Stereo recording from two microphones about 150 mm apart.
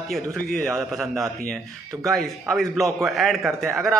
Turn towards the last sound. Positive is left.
turn(degrees=0)  # may be behind; listen again after turning